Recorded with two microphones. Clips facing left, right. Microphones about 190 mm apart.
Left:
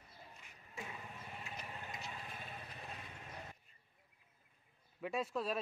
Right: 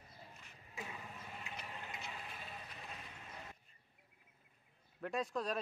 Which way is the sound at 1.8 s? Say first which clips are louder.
Left 1 dB; 40° left (ahead or behind).